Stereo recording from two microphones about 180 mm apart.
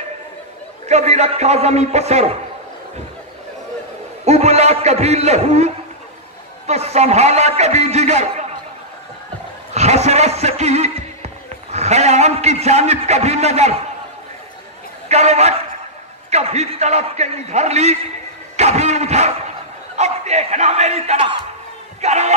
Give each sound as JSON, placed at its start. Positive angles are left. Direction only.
{"t": 0.8, "sound": "a man's voice", "side_deg": -40}
{"t": 4.2, "sound": "a man's voice", "side_deg": -35}
{"t": 6.7, "sound": "a man's voice", "side_deg": -35}
{"t": 10.0, "sound": "speech", "side_deg": -35}
{"t": 15.0, "sound": "a man's voice", "side_deg": -40}
{"t": 18.6, "sound": "a sound", "side_deg": -35}
{"t": 20.0, "sound": "a man's voice", "side_deg": -40}